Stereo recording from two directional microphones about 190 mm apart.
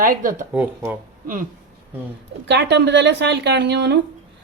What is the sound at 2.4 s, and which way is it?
Speech, 65° right (ahead or behind).